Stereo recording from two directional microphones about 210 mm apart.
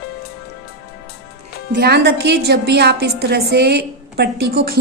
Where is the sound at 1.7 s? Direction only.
50° right (ahead or behind).